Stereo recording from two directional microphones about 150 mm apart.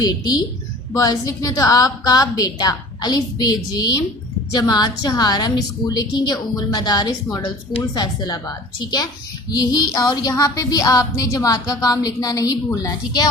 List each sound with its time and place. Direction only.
0.0 s speech: 25° left (ahead or behind)